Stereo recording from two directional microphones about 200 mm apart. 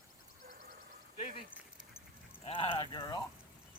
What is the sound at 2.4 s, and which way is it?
Speech, 25° left (ahead or behind).